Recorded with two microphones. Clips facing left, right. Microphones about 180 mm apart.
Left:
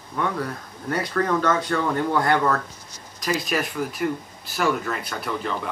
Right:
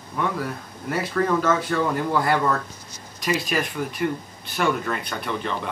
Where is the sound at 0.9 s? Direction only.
5° right (ahead or behind).